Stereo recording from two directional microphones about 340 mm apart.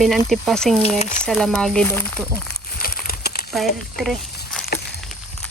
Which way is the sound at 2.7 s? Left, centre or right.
Left.